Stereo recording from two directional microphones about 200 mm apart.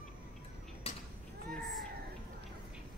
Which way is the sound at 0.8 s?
30° left (ahead or behind).